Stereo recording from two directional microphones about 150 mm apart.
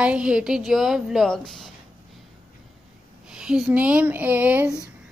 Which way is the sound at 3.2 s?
5° right (ahead or behind).